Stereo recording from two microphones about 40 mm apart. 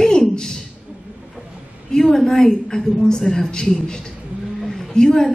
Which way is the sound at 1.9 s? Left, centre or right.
Centre.